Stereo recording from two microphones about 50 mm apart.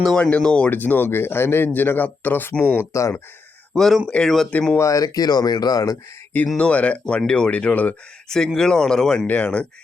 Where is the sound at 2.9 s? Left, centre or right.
Left.